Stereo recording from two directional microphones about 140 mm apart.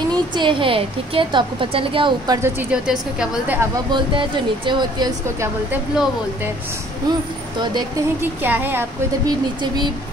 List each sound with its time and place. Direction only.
0.1 s speech: 35° right (ahead or behind)
2.7 s a woman's voice: 5° right (ahead or behind)
3.7 s speech: 35° right (ahead or behind)
5.7 s a woman's voice: 15° right (ahead or behind)
8.2 s a woman's voice: 15° right (ahead or behind)
9.2 s speech: 30° right (ahead or behind)